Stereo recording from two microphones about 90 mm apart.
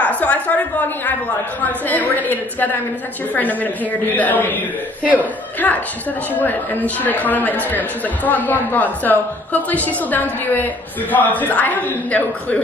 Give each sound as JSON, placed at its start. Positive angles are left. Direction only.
{"t": 0.0, "sound": "a woman's voice", "side_deg": 15}